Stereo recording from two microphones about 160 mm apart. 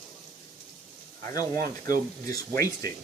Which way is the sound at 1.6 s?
20° left (ahead or behind).